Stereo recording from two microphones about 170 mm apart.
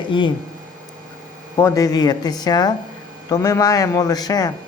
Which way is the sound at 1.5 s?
15° left (ahead or behind).